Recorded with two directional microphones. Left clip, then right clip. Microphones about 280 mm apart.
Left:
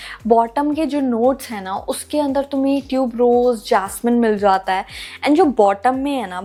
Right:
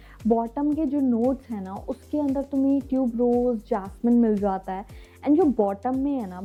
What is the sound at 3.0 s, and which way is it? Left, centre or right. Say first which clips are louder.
Speech: left 10 dB; left.